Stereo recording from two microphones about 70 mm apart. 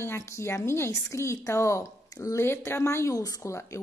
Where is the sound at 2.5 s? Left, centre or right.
Left.